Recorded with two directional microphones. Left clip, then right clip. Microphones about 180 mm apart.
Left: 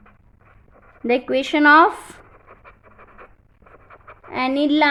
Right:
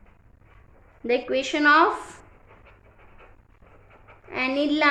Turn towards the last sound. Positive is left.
turn(degrees=40)  # may be behind; listen again after turning